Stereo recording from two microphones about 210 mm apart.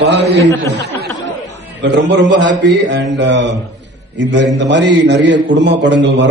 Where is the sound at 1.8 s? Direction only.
55° right (ahead or behind).